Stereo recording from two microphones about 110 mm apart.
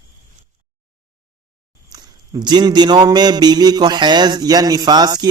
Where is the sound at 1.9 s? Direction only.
40° right (ahead or behind).